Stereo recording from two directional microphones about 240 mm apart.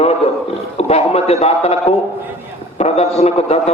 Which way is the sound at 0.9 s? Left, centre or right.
Left.